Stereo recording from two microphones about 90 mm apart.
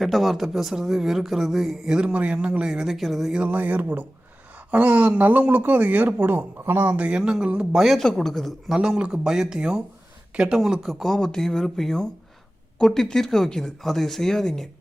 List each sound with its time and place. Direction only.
0.0 s speech: centre (ahead or behind)
3.4 s speech: 15° right (ahead or behind); by 14.7 s 5° left (ahead or behind)